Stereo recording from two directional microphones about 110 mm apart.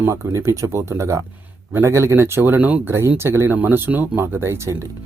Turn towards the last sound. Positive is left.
turn(degrees=-25)  # may be behind; listen again after turning